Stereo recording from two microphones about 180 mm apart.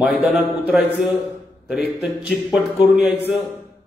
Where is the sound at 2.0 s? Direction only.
Centre (ahead or behind).